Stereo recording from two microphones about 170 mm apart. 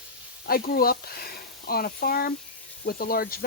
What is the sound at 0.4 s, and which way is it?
Speech, 60° left (ahead or behind).